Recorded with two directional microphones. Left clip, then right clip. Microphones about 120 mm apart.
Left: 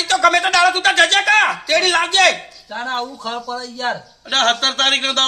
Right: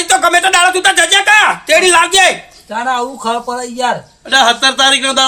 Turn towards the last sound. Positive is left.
turn(degrees=20)  # may be behind; listen again after turning